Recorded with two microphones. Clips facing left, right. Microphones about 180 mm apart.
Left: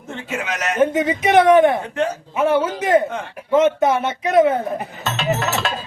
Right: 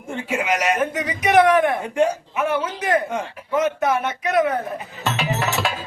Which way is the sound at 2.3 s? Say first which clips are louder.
Left 5 dB; 30° left (ahead or behind).